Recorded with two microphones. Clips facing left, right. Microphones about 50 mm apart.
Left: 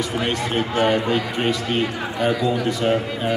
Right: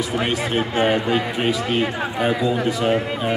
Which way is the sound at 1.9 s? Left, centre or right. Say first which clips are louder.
Right 2 dB; right.